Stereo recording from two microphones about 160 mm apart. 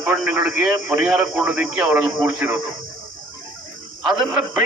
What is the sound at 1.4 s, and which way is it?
Speech, 5° right (ahead or behind).